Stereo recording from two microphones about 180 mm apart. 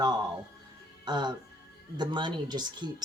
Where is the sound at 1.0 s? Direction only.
25° right (ahead or behind).